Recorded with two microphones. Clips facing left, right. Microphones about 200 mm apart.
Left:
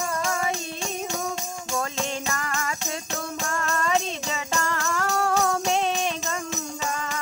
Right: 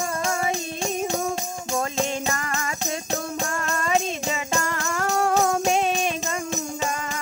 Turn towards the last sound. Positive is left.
turn(degrees=-15)  # may be behind; listen again after turning